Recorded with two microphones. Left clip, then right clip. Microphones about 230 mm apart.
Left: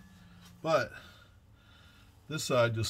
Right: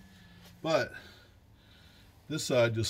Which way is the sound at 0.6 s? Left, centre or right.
Left.